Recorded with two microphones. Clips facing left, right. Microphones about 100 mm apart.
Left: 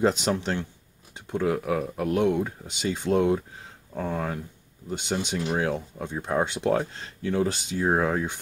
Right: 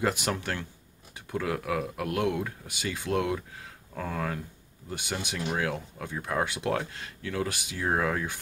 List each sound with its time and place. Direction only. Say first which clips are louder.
0.0 s speech: left 5 dB; 20° left (ahead or behind)